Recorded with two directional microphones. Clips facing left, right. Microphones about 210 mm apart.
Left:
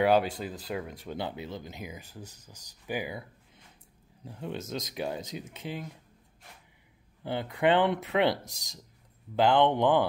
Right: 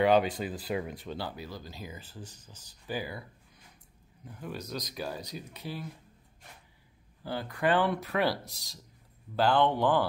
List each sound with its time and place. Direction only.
0.0 s speech: 5° left (ahead or behind)
1.0 s speech: 20° left (ahead or behind)
7.2 s speech: 20° left (ahead or behind)